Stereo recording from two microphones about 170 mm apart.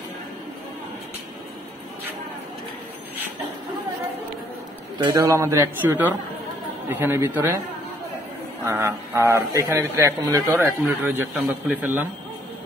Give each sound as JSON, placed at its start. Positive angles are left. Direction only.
{"t": 4.9, "sound": "a man's voice", "side_deg": -25}
{"t": 8.6, "sound": "a man's voice", "side_deg": -15}